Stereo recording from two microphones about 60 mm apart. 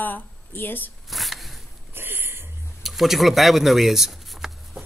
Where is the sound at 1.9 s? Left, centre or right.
Right.